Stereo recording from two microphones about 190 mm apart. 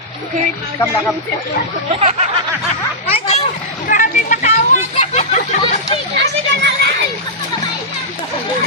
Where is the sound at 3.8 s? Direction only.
45° left (ahead or behind).